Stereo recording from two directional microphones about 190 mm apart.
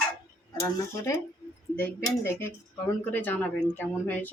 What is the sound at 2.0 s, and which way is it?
Speech, 15° left (ahead or behind).